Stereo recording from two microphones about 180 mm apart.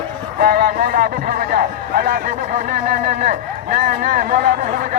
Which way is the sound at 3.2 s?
45° right (ahead or behind).